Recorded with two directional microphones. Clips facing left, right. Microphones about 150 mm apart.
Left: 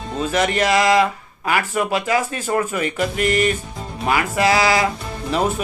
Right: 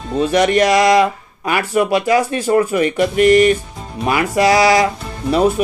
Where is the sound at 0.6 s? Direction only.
35° right (ahead or behind).